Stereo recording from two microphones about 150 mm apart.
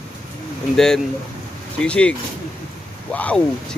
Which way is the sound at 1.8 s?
5° left (ahead or behind).